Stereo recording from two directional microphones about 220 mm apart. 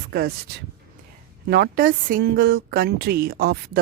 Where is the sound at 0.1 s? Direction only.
45° right (ahead or behind).